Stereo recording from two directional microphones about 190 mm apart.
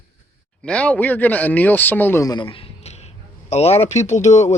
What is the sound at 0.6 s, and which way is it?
Speech, 5° left (ahead or behind).